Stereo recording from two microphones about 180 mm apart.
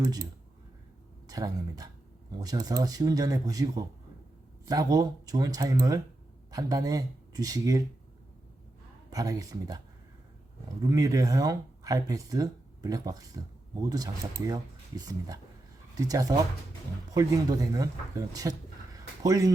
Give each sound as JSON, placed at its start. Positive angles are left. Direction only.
{"t": 0.0, "sound": "speech", "side_deg": -20}
{"t": 1.3, "sound": "speech", "side_deg": -20}
{"t": 9.0, "sound": "speech", "side_deg": -20}
{"t": 10.8, "sound": "speech", "side_deg": -20}
{"t": 18.9, "sound": "a sound", "side_deg": -20}